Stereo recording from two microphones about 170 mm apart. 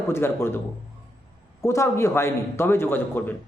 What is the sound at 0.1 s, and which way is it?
Speech, 15° left (ahead or behind).